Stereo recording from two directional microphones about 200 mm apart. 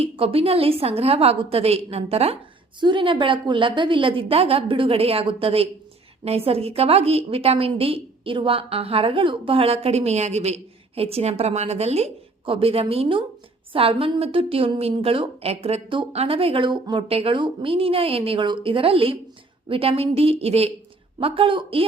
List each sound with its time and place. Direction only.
0.0 s a woman's voice: 30° right (ahead or behind)